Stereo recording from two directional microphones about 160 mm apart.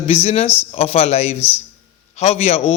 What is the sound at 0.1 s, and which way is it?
A man's voice, 40° left (ahead or behind).